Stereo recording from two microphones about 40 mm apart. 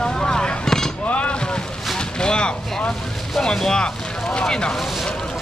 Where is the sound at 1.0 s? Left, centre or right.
Left.